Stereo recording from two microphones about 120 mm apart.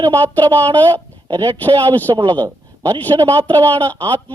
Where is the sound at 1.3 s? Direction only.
40° right (ahead or behind).